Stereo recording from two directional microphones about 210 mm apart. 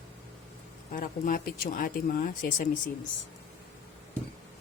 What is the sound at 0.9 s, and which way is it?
Speech, 40° left (ahead or behind).